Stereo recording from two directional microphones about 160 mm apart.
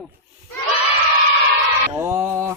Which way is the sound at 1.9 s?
20° right (ahead or behind).